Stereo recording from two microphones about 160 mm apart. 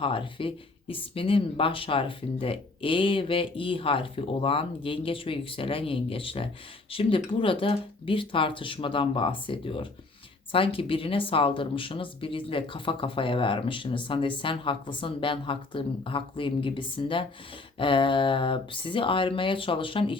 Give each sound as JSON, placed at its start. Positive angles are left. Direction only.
{"t": 0.0, "sound": "speech", "side_deg": 35}